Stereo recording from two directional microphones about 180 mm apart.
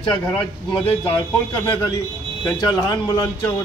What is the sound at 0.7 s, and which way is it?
A man's voice, 25° left (ahead or behind).